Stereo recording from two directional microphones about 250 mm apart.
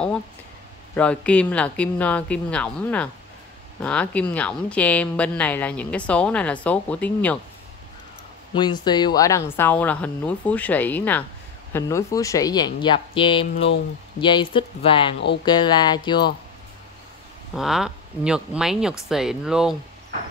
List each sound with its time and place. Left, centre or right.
0.9 s speech: centre
8.5 s speech: centre
17.6 s speech: centre